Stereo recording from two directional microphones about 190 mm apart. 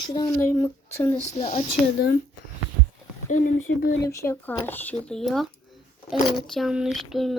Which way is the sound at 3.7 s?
70° left (ahead or behind).